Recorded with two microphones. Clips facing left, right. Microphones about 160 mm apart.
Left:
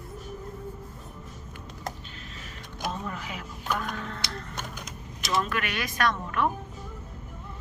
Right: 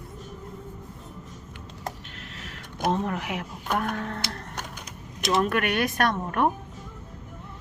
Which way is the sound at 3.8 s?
55° right (ahead or behind).